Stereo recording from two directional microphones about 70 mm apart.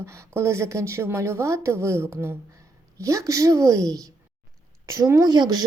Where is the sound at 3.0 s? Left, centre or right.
Right.